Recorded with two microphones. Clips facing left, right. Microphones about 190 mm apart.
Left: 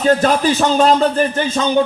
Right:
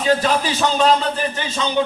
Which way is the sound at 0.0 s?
45° left (ahead or behind).